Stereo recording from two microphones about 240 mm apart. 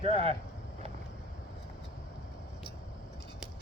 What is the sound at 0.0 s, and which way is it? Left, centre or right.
Speech, right.